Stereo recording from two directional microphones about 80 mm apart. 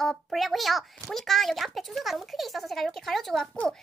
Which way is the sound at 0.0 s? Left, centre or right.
Centre.